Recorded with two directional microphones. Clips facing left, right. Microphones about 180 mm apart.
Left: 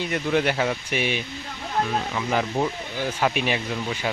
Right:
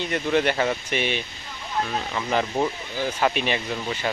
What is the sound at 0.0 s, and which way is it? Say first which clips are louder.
Speech: right 1 dB; 5° left (ahead or behind).